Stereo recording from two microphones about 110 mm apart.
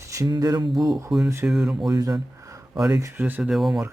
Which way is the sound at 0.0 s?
30° right (ahead or behind).